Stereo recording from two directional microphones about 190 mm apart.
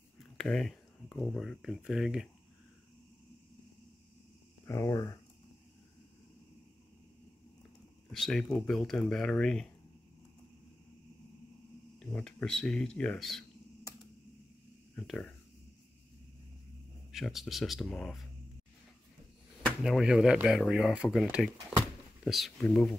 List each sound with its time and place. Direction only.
0.4 s speech: centre (ahead or behind)
4.6 s speech: 15° left (ahead or behind)
8.1 s speech: centre (ahead or behind)
12.0 s speech: 5° left (ahead or behind)
15.0 s speech: 5° left (ahead or behind)
17.1 s speech: centre (ahead or behind)
19.6 s speech: centre (ahead or behind)